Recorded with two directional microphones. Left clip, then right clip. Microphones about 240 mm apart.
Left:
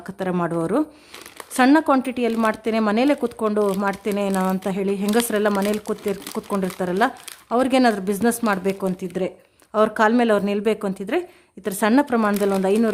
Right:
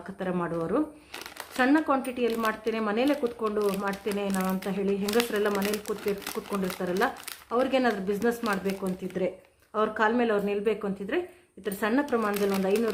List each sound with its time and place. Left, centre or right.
0.2 s speech: left